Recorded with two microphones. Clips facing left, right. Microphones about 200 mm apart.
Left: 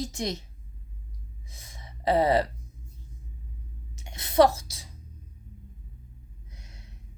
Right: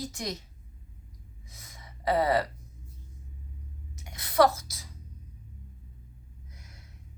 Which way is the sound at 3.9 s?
25° left (ahead or behind).